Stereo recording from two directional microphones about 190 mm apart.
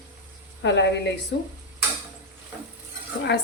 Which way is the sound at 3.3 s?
60° left (ahead or behind).